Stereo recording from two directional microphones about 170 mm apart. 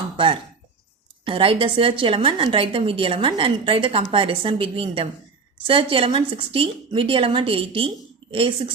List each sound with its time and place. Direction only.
1.2 s a woman's voice: 30° right (ahead or behind)